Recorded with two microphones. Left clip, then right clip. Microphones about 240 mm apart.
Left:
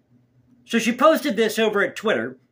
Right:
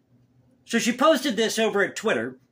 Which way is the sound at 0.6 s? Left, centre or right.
Centre.